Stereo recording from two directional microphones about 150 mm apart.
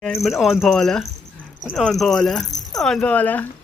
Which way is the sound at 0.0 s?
Centre (ahead or behind).